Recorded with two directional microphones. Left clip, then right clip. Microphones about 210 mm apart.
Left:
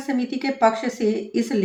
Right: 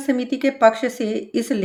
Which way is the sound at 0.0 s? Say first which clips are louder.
Right 4 dB; 55° right (ahead or behind).